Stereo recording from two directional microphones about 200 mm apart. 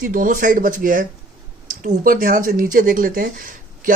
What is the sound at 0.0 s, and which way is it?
Speech, 45° right (ahead or behind).